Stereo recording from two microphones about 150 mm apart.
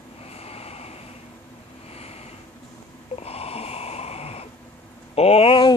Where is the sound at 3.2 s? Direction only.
40° left (ahead or behind).